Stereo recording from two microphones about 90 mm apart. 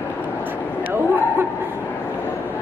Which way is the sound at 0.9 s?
25° right (ahead or behind).